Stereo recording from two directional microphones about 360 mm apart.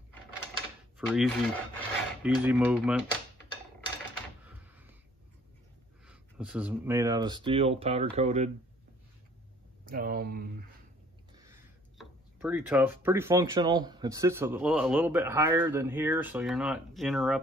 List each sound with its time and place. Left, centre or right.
0.9 s filing: centre
4.5 s a sound: centre
6.0 s speech: centre
9.8 s speech: right
12.0 s speech: centre